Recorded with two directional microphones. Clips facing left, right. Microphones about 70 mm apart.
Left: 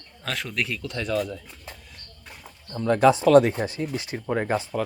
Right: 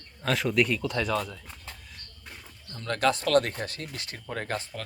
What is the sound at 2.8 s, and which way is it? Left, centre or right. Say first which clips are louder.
Speech: left 8 dB; centre.